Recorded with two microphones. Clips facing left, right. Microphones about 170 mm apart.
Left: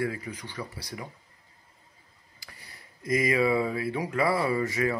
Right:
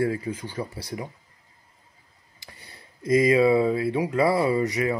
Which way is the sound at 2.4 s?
25° right (ahead or behind).